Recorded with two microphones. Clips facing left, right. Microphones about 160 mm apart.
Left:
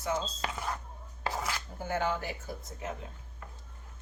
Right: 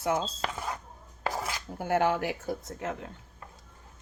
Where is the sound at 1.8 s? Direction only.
70° right (ahead or behind).